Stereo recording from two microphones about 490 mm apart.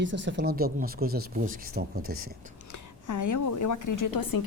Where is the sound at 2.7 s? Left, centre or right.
Left.